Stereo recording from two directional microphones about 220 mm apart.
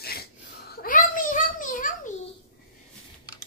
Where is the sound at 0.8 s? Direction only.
40° left (ahead or behind).